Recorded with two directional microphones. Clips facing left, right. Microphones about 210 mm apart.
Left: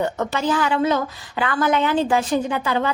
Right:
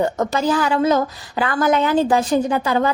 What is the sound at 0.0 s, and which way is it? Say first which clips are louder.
A woman's voice: right 3 dB; 40° right (ahead or behind).